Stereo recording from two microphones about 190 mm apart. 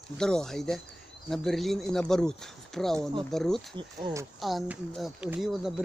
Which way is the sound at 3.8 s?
20° right (ahead or behind).